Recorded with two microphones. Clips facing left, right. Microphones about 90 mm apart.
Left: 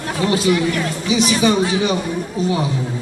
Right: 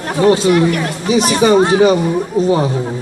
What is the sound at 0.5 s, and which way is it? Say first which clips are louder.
Speech: right 5 dB; 50° right (ahead or behind).